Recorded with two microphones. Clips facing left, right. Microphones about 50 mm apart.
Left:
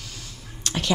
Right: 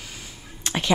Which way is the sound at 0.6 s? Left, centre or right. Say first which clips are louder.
Right 1 dB; right.